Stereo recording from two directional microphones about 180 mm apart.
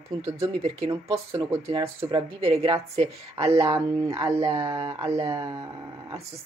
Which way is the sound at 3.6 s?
20° right (ahead or behind).